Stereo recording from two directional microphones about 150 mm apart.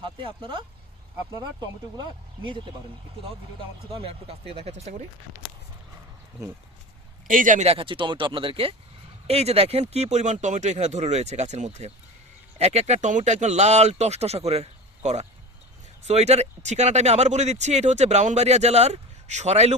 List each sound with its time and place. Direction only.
0.0 s speech: 35° right (ahead or behind)
3.9 s speech: 40° right (ahead or behind)
7.3 s speech: 60° right (ahead or behind)